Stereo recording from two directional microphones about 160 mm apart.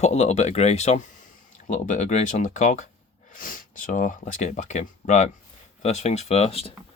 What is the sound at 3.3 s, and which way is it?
Speech, 60° left (ahead or behind).